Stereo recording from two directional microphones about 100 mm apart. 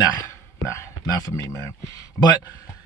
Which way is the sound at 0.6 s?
30° left (ahead or behind).